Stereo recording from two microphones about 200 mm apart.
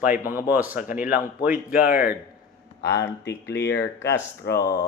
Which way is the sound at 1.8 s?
45° left (ahead or behind).